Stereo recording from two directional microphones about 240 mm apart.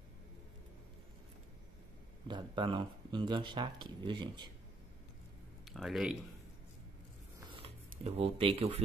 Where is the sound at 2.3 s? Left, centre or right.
Centre.